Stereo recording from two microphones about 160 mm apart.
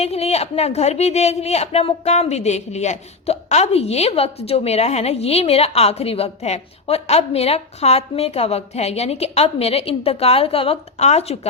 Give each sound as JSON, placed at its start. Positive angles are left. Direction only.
{"t": 0.0, "sound": "speech", "side_deg": 40}